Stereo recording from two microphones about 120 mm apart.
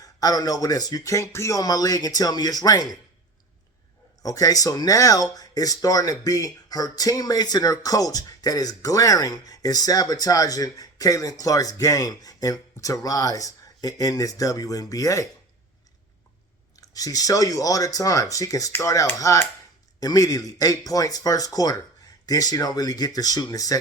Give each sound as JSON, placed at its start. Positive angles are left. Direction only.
{"t": 0.0, "sound": "speech", "side_deg": 30}
{"t": 4.2, "sound": "speech", "side_deg": 30}
{"t": 16.7, "sound": "speech", "side_deg": 30}